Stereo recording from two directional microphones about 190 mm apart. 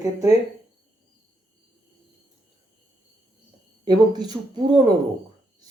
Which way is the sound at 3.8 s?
20° right (ahead or behind).